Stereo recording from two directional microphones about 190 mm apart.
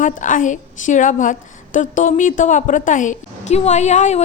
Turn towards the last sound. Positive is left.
turn(degrees=35)  # may be behind; listen again after turning